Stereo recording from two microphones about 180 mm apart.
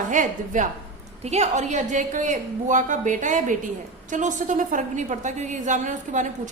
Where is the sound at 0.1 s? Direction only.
45° right (ahead or behind).